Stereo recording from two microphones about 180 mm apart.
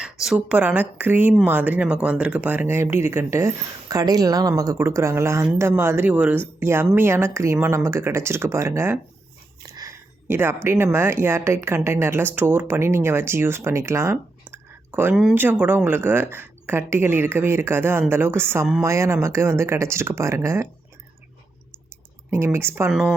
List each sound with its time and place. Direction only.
0.0 s speech: 5° right (ahead or behind)
22.3 s speech: 15° right (ahead or behind)
22.9 s speech: centre (ahead or behind)